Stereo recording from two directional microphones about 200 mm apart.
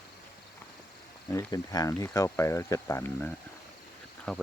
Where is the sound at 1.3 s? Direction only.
15° left (ahead or behind).